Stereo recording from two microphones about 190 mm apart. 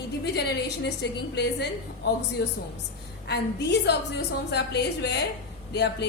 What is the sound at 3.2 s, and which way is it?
A woman's voice, 65° left (ahead or behind).